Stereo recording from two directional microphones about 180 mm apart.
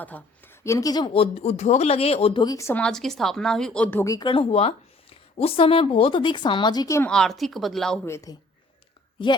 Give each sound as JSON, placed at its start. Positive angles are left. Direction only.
{"t": 0.0, "sound": "speech", "side_deg": 10}
{"t": 4.0, "sound": "a woman's voice", "side_deg": 20}
{"t": 7.1, "sound": "speech", "side_deg": 0}
{"t": 8.0, "sound": "speech", "side_deg": 15}